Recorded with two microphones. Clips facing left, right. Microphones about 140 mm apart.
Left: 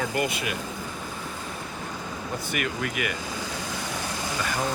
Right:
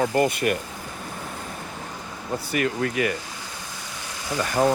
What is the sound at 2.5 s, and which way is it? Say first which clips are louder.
Speech: right 6 dB; 35° right (ahead or behind).